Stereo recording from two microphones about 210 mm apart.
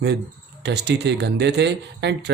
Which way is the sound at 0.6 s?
55° right (ahead or behind).